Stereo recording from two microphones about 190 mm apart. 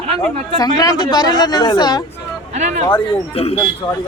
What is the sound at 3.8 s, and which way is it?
Speech, 15° left (ahead or behind).